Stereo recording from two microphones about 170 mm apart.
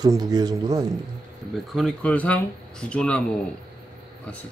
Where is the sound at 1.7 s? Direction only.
Centre (ahead or behind).